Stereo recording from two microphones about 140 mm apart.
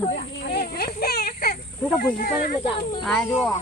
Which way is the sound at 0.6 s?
90° left.